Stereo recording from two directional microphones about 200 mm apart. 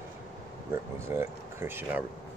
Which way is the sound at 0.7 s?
15° right (ahead or behind).